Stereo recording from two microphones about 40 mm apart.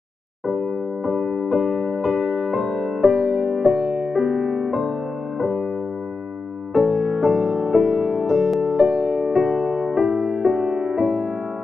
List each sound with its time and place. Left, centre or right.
0.5 s electric piano: centre
6.7 s music: centre